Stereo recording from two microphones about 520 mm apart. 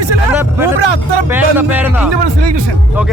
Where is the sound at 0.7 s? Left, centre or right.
Right.